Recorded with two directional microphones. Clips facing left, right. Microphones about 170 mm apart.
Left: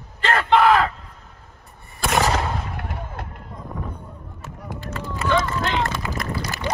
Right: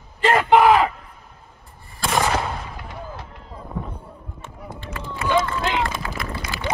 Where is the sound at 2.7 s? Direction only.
60° left (ahead or behind).